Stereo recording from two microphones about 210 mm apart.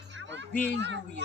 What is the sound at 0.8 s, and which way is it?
Speech, 55° right (ahead or behind).